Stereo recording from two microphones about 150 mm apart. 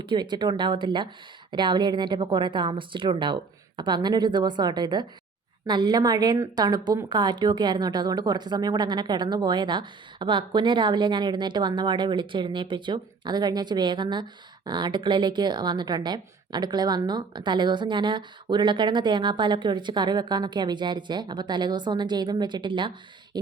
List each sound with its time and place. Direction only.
0.0 s a woman's voice: 30° right (ahead or behind)